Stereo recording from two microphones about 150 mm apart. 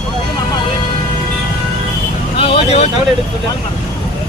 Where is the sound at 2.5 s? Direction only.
45° left (ahead or behind).